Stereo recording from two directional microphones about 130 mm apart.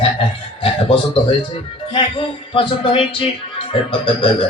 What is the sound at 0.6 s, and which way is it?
Music, 45° left (ahead or behind).